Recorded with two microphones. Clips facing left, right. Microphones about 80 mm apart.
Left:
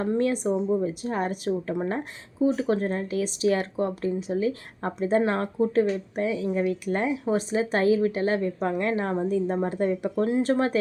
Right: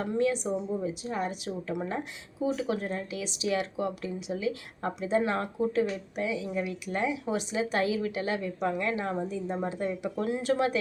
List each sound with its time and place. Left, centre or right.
0.0 s a woman's voice: left
10.2 s speech: left